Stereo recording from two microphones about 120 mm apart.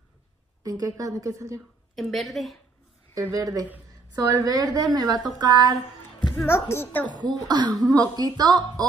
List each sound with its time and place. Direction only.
0.7 s a woman's voice: 30° right (ahead or behind)
2.0 s a woman's voice: centre (ahead or behind)
3.2 s a woman's voice: 30° right (ahead or behind)
6.3 s speech: 20° left (ahead or behind)
7.1 s a woman's voice: 35° right (ahead or behind)